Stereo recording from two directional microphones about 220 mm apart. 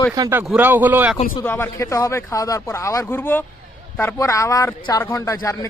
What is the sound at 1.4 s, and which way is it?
Speech, 10° left (ahead or behind).